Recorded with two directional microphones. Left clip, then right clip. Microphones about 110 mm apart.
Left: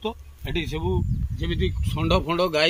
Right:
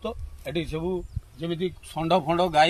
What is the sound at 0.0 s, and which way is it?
Speech, 35° right (ahead or behind).